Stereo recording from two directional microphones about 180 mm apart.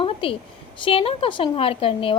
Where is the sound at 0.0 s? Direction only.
30° left (ahead or behind).